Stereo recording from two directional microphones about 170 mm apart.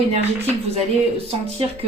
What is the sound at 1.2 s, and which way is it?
Speech, 35° right (ahead or behind).